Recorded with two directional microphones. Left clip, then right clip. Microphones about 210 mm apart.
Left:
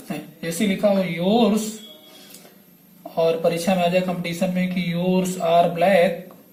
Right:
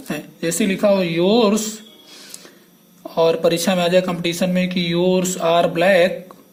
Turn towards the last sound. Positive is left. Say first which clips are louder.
# right 2 dB
turn(degrees=-45)  # may be behind; listen again after turning